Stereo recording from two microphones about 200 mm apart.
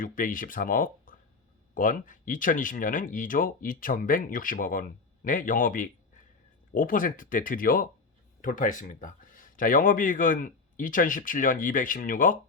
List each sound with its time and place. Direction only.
0.0 s speech: 45° left (ahead or behind)